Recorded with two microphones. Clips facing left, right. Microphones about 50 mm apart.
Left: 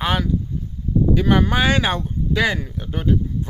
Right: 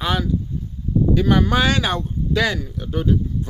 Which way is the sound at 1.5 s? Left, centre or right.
Centre.